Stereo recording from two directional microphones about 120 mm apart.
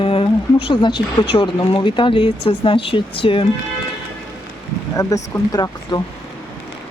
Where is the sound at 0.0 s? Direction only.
50° left (ahead or behind).